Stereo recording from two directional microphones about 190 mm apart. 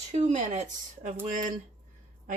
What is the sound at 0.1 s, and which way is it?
A woman's voice, 35° right (ahead or behind).